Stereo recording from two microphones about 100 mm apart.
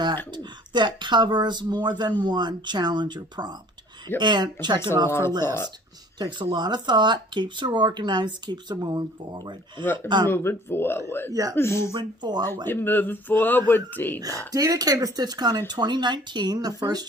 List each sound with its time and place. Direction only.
0.3 s speech: 50° right (ahead or behind)
5.0 s speech: 25° left (ahead or behind)
6.1 s speech: 45° right (ahead or behind)
9.8 s speech: 20° left (ahead or behind)
11.9 s speech: 45° right (ahead or behind)
12.6 s speech: 20° left (ahead or behind)
14.5 s speech: 35° right (ahead or behind)